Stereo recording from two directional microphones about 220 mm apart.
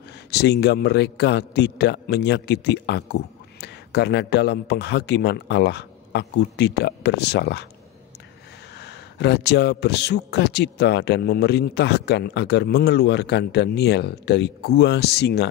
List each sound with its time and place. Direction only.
0.3 s speech: 50° left (ahead or behind)
8.7 s speech: 50° left (ahead or behind)